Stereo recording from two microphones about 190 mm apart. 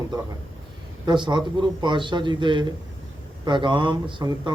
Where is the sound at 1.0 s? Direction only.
25° right (ahead or behind).